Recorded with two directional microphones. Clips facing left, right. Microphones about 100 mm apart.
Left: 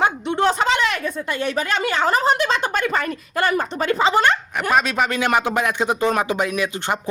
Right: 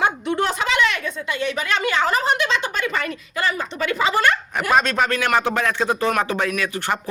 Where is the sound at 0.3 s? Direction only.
30° left (ahead or behind).